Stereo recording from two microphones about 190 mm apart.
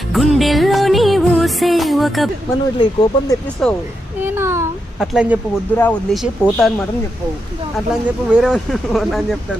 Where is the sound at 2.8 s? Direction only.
20° left (ahead or behind).